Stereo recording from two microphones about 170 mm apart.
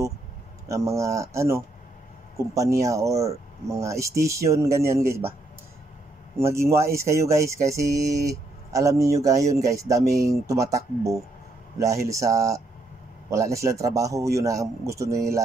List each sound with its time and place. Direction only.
0.7 s speech: 20° right (ahead or behind)
6.4 s speech: 15° right (ahead or behind)